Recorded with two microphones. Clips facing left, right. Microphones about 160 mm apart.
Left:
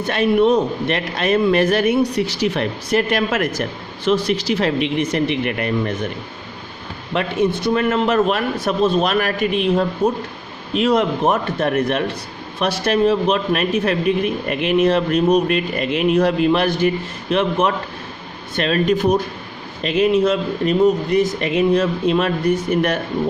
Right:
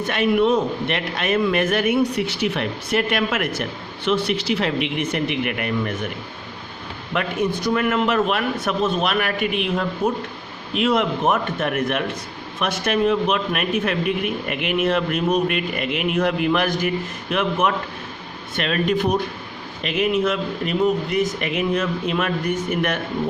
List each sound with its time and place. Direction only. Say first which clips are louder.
0.0 s a man's voice: left 3 dB; 35° left (ahead or behind)
7.1 s a man's voice: left 4 dB; 25° left (ahead or behind)